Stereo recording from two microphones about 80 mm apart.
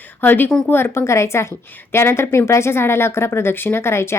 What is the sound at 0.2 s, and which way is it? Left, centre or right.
A woman's voice, left.